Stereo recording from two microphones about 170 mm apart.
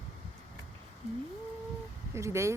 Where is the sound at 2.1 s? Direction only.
15° right (ahead or behind).